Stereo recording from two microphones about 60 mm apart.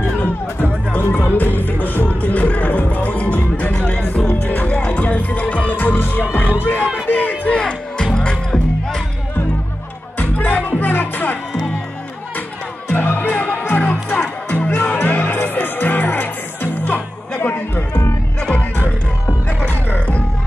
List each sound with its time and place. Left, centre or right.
0.0 s music: left
7.1 s crowd: left
7.5 s music: centre
10.1 s music: left
12.8 s music: left
19.6 s music: left